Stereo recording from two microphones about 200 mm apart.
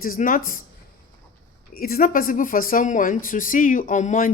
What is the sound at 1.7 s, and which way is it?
Speech, 45° left (ahead or behind).